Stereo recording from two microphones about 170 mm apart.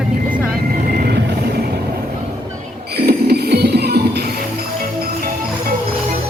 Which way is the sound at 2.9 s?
70° right (ahead or behind).